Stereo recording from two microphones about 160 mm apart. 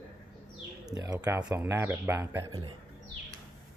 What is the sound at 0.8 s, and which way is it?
Speech, 25° right (ahead or behind).